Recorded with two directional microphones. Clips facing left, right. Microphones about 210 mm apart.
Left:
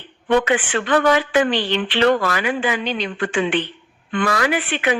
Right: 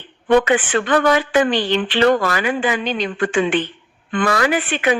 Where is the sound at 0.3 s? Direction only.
45° right (ahead or behind).